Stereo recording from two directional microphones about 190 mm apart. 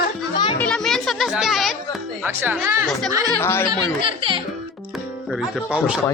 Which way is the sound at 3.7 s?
25° right (ahead or behind).